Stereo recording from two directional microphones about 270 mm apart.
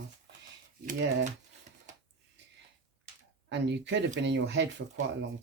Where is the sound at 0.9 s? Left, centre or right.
Right.